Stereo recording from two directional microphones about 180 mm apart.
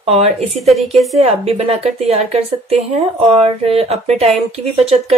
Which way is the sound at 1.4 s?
35° right (ahead or behind).